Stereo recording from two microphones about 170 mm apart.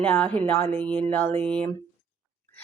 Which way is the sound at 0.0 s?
5° left (ahead or behind).